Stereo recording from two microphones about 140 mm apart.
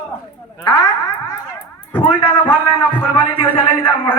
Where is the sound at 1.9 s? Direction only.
40° left (ahead or behind).